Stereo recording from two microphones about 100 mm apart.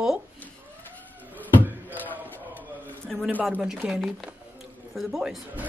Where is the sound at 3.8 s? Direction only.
5° right (ahead or behind).